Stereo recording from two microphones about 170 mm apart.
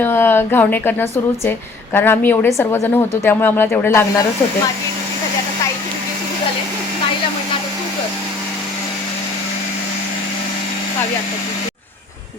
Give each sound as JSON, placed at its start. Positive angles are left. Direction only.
{"t": 0.0, "sound": "a woman's voice", "side_deg": 10}